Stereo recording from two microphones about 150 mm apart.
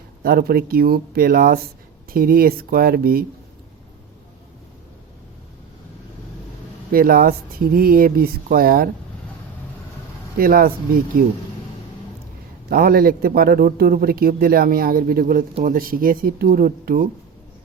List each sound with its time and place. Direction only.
0.2 s a man's voice: 90° right
6.9 s a man's voice: 75° right (ahead or behind)
10.3 s speech: 75° right (ahead or behind)
12.6 s a man's voice: 90° right; by 17.1 s 70° right (ahead or behind)